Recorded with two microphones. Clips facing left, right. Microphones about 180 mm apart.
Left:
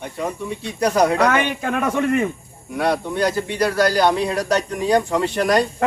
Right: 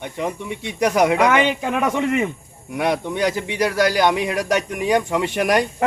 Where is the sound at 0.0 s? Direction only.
20° right (ahead or behind).